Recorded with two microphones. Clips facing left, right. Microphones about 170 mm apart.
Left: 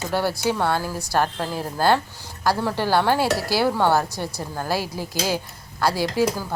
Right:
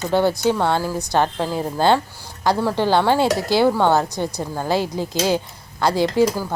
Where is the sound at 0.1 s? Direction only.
20° right (ahead or behind).